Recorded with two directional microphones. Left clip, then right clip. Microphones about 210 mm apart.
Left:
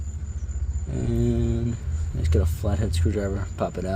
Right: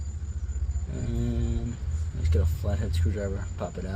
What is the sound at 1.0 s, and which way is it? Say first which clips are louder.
Mantra: left 8 dB; 50° left (ahead or behind).